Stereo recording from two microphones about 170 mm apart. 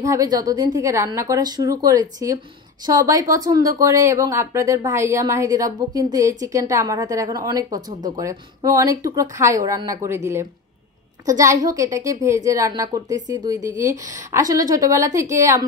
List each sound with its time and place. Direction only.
0.0 s speech: 20° right (ahead or behind)